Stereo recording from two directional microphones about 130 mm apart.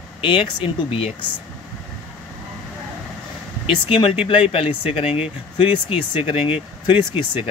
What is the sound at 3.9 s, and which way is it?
Speech, 45° left (ahead or behind).